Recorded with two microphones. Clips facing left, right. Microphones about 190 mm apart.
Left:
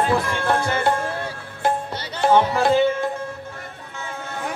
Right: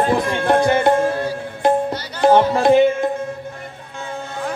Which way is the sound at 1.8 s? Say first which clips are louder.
Right 5 dB; 15° right (ahead or behind).